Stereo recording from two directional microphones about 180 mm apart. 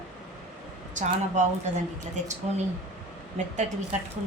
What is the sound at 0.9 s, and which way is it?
Speech, 40° right (ahead or behind).